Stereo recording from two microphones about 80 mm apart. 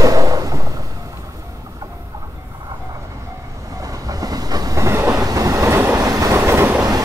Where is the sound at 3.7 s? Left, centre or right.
Right.